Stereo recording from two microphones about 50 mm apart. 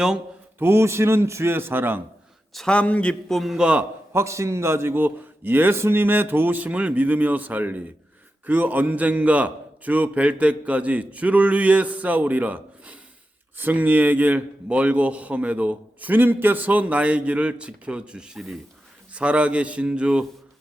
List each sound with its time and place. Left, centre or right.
0.6 s a man's voice: right
2.6 s a man's voice: left
3.2 s a man's voice: centre
3.6 s a man's voice: right
4.1 s a man's voice: right; by 18.3 s centre
18.3 s a man's voice: centre
19.1 s a man's voice: right